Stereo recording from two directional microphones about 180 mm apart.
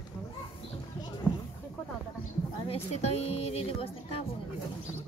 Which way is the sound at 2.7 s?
35° left (ahead or behind).